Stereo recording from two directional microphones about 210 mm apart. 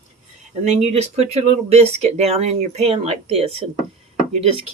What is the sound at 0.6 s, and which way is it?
Speech, 30° right (ahead or behind).